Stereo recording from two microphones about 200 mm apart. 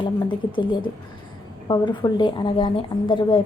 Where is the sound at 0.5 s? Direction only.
25° left (ahead or behind).